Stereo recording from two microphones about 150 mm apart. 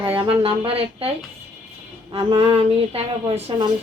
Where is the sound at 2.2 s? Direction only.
35° right (ahead or behind).